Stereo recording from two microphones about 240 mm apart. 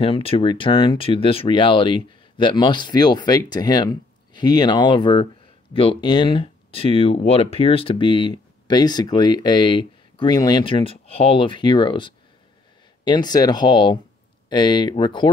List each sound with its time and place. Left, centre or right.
0.0 s speech: left